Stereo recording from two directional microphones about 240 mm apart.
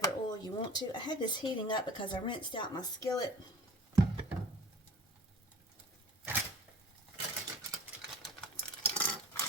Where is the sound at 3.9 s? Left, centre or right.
Centre.